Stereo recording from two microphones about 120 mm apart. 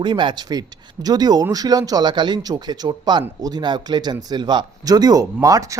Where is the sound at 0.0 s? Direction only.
40° right (ahead or behind).